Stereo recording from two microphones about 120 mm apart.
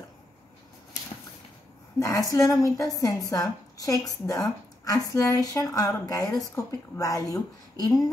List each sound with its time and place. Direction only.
2.0 s a woman's voice: 30° left (ahead or behind)